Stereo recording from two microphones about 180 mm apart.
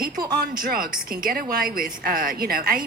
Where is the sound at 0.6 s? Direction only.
55° right (ahead or behind).